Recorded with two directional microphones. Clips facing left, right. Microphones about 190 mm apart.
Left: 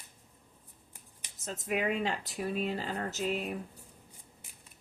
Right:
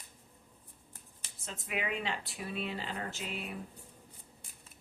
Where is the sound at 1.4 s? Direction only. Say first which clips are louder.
Left 6 dB; 40° left (ahead or behind).